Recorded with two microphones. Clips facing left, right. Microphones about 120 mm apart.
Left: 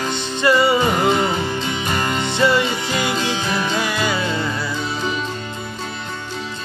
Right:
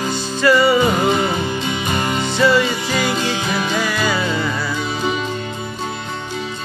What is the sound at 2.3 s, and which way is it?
Music, 20° left (ahead or behind).